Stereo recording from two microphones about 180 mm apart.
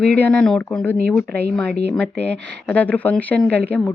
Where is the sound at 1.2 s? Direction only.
60° right (ahead or behind).